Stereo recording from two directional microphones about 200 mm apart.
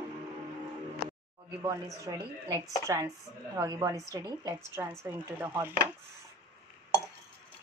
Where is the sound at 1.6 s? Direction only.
15° right (ahead or behind).